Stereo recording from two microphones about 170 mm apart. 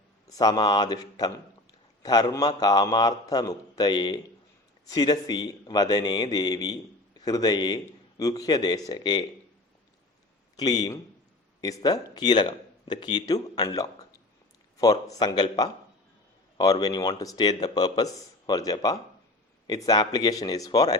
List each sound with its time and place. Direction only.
0.3 s speech: 25° left (ahead or behind)
10.6 s speech: 25° left (ahead or behind)
16.8 s speech: 25° left (ahead or behind)